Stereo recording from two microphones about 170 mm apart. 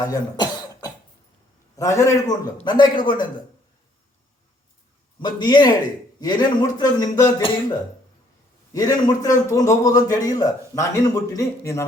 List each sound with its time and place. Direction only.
0.0 s cough: 20° left (ahead or behind)
1.7 s a man's voice: 20° left (ahead or behind)
5.2 s a man's voice: 25° left (ahead or behind)
8.7 s a man's voice: 20° left (ahead or behind)